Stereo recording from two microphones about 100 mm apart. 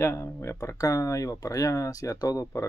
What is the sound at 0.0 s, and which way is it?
Speech, 30° left (ahead or behind).